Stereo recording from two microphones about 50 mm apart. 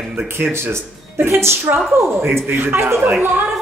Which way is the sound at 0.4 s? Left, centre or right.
Right.